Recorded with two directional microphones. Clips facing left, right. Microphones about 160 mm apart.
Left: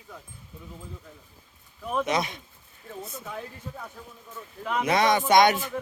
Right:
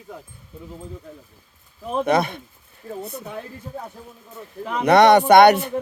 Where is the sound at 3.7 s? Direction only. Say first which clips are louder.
Right 6 dB; 45° right (ahead or behind).